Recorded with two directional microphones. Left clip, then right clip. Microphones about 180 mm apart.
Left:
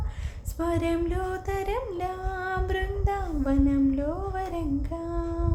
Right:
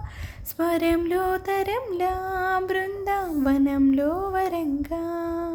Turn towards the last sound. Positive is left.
turn(degrees=-35)  # may be behind; listen again after turning